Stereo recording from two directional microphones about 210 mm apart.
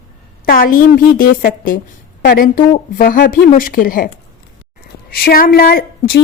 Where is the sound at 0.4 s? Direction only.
40° left (ahead or behind).